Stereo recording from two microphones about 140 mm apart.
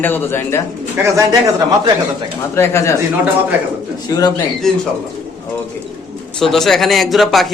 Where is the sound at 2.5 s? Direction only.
20° left (ahead or behind).